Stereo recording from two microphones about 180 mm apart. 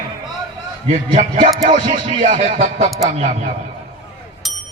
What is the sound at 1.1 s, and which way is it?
Speech, 45° right (ahead or behind).